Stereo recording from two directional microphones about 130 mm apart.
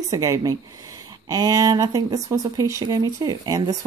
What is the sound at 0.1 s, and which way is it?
Speech, 25° right (ahead or behind).